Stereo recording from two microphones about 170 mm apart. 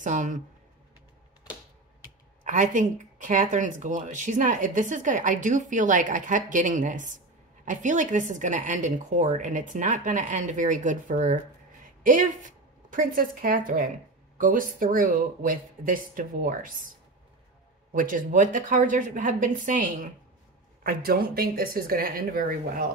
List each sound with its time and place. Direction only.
0.0 s speech: 45° right (ahead or behind)
1.4 s typewriter: 25° left (ahead or behind)
2.4 s a woman's voice: 50° right (ahead or behind)
17.9 s speech: 50° right (ahead or behind)
20.8 s a woman's voice: 65° right (ahead or behind)